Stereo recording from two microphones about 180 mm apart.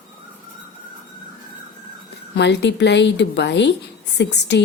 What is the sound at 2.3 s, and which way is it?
A woman's voice, 70° left (ahead or behind).